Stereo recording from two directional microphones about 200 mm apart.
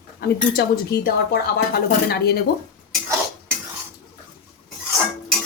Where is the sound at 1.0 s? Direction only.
55° left (ahead or behind).